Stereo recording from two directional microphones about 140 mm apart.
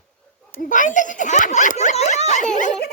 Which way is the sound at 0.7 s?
65° left (ahead or behind).